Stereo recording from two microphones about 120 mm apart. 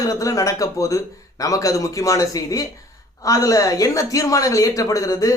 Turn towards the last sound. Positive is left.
turn(degrees=30)  # may be behind; listen again after turning